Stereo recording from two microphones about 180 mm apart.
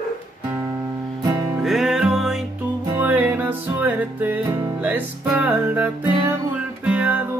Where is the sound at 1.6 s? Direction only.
Centre (ahead or behind).